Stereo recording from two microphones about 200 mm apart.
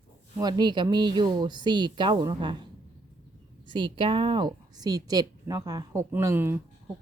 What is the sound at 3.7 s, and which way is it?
A woman's voice, 25° right (ahead or behind).